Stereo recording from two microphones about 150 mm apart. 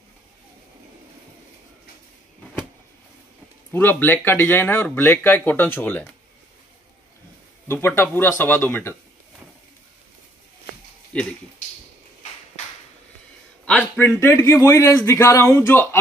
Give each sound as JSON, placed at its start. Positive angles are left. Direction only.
{"t": 3.7, "sound": "speech", "side_deg": 15}
{"t": 7.6, "sound": "speech", "side_deg": 15}
{"t": 13.7, "sound": "speech", "side_deg": 10}